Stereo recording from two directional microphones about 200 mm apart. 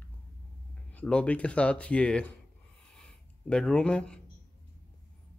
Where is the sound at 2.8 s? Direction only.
5° left (ahead or behind).